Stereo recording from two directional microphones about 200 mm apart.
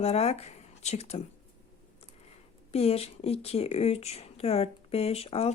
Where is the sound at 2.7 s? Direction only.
30° left (ahead or behind).